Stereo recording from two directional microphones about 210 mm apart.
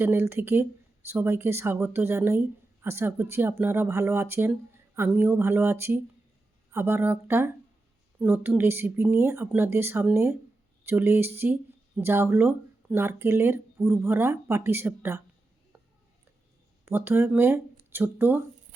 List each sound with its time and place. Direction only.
0.0 s speech: 10° right (ahead or behind)
16.8 s speech: 10° right (ahead or behind)